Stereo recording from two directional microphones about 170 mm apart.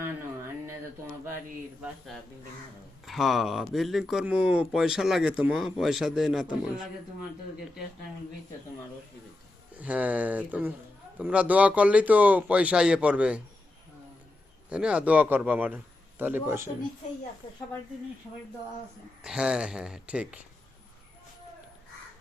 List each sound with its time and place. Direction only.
0.0 s a sound: 15° right (ahead or behind)
3.1 s speech: centre (ahead or behind)
9.7 s speech: 10° right (ahead or behind)
14.7 s speech: 5° right (ahead or behind)
17.4 s speech: 30° left (ahead or behind)
19.2 s speech: 5° right (ahead or behind)